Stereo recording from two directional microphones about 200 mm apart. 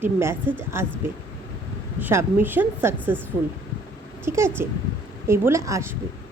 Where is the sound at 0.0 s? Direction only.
10° right (ahead or behind).